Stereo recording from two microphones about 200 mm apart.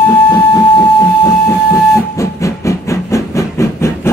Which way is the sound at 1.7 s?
15° left (ahead or behind).